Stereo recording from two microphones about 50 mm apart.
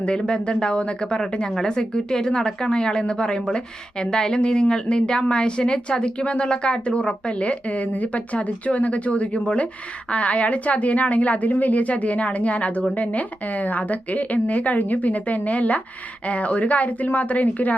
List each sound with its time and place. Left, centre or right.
0.0 s a woman's voice: left